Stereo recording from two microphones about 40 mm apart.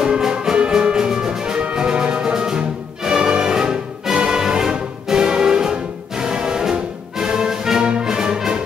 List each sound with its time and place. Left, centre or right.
0.0 s music: centre